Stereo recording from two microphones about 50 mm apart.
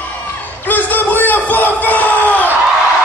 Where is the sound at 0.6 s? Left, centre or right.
Left.